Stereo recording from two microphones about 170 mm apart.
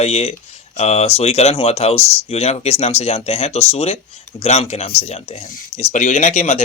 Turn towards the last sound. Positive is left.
turn(degrees=40)  # may be behind; listen again after turning